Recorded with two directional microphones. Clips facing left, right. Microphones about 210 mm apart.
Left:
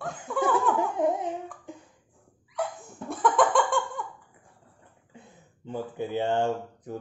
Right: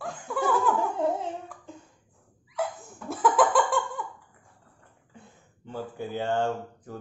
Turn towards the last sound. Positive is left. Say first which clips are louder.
# left 1 dB
turn(degrees=20)  # may be behind; listen again after turning